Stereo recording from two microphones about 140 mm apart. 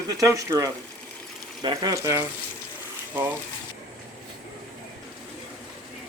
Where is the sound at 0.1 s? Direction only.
25° right (ahead or behind).